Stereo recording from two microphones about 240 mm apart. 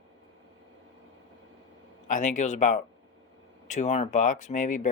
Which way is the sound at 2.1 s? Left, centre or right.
Left.